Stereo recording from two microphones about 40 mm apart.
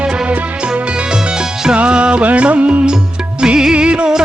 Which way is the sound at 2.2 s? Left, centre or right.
Right.